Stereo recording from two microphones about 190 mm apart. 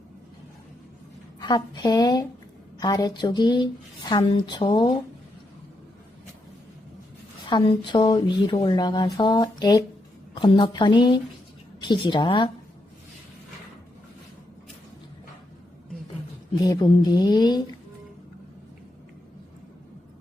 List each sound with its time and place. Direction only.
1.4 s speech: 20° left (ahead or behind)
7.5 s speech: 25° left (ahead or behind)
16.6 s speech: 20° left (ahead or behind)